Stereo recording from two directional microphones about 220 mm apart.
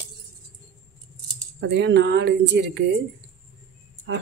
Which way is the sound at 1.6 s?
50° right (ahead or behind).